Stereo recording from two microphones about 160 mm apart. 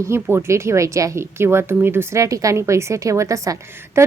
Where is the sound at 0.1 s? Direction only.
15° right (ahead or behind).